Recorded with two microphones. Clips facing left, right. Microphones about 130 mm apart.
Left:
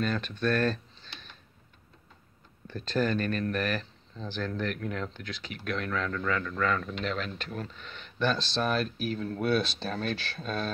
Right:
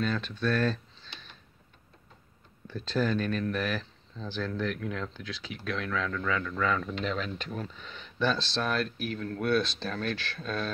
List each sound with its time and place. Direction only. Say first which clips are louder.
0.0 s speech: left 1 dB; centre (ahead or behind)
3.0 s speech: even; 5° left (ahead or behind)
8.6 s speech: left 2 dB; 15° left (ahead or behind)
8.9 s speech: left 2 dB; 90° right
9.2 s speech: right 1 dB; 10° left (ahead or behind)
10.1 s speech: left 1 dB; 5° left (ahead or behind)
10.4 s speech: even; 15° left (ahead or behind)